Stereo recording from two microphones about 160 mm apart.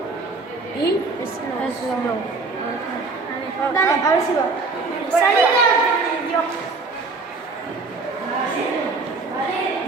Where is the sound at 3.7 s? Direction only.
20° left (ahead or behind).